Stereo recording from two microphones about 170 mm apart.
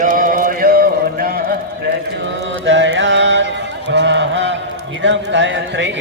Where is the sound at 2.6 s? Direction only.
90° right.